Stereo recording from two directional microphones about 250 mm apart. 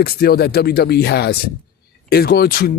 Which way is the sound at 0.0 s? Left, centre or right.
Left.